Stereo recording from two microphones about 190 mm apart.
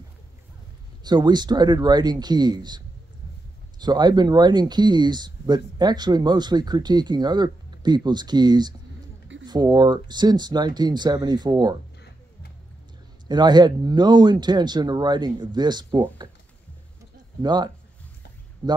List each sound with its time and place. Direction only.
1.0 s speech: 20° right (ahead or behind)
3.8 s speech: 20° right (ahead or behind)
13.3 s speech: 20° right (ahead or behind)
17.4 s speech: 20° right (ahead or behind)